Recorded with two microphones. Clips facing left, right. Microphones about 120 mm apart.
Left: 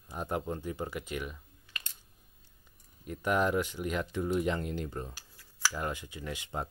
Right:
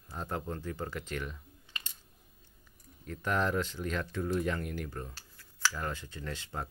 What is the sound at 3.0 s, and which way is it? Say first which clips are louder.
Speech: left 3 dB; 15° left (ahead or behind).